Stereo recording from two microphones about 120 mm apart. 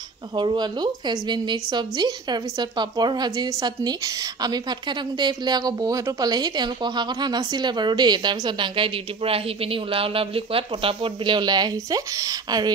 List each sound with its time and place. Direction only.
0.4 s speech: 40° right (ahead or behind)